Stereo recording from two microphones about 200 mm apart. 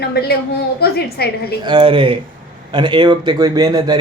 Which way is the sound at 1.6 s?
25° right (ahead or behind).